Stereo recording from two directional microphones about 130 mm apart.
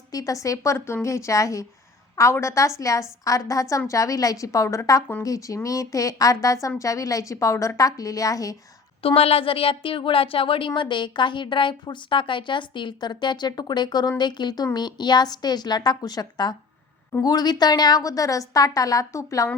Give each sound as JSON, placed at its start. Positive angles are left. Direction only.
{"t": 0.1, "sound": "a woman's voice", "side_deg": 25}
{"t": 9.0, "sound": "a woman's voice", "side_deg": 45}